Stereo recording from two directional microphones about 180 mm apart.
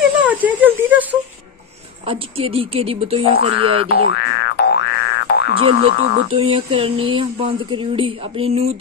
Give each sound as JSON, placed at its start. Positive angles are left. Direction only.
{"t": 0.2, "sound": "a sound", "side_deg": -10}
{"t": 2.0, "sound": "speech", "side_deg": -30}
{"t": 3.9, "sound": "boing", "side_deg": 60}
{"t": 5.5, "sound": "speech", "side_deg": -30}